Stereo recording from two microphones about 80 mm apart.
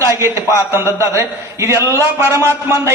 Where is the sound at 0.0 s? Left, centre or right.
Right.